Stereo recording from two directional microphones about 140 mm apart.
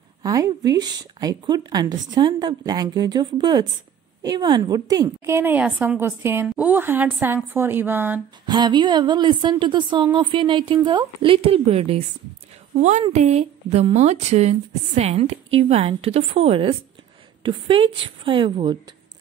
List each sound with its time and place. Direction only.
0.2 s a woman's voice: 25° right (ahead or behind)
8.5 s speech: 30° right (ahead or behind)
13.1 s a woman's voice: 50° right (ahead or behind); by 18.8 s 35° right (ahead or behind)